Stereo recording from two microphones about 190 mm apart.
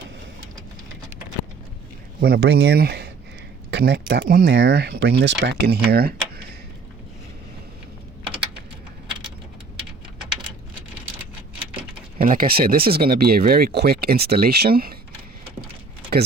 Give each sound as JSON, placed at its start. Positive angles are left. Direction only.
{"t": 2.2, "sound": "speech", "side_deg": -60}
{"t": 12.2, "sound": "speech", "side_deg": -45}